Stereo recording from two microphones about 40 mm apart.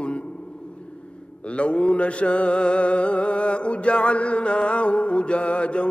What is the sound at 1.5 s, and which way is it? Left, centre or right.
Mantra, left.